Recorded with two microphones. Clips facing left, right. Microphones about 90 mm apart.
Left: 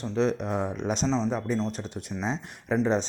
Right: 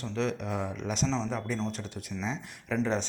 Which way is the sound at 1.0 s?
15° left (ahead or behind).